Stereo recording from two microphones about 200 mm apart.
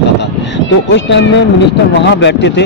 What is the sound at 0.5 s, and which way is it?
A man's voice, 65° left (ahead or behind).